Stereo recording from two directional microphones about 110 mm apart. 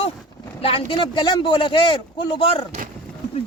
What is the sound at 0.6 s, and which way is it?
Speech, 55° left (ahead or behind).